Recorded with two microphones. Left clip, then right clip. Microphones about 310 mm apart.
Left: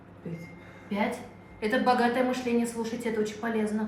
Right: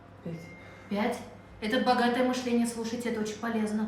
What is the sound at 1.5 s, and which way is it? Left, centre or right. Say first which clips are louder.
A woman's voice: left 2 dB; centre.